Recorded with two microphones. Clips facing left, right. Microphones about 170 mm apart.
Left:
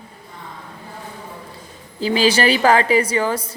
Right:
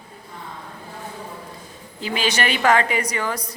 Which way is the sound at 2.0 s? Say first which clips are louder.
Left 7 dB; 35° left (ahead or behind).